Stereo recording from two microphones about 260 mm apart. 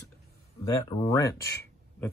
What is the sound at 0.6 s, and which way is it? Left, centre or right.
Speech, centre.